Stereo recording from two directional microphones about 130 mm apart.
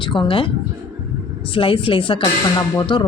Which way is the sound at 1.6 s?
40° left (ahead or behind).